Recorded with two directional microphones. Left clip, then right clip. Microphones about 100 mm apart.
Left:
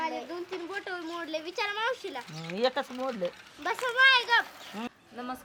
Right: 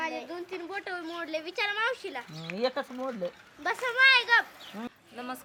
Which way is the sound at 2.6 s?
25° left (ahead or behind).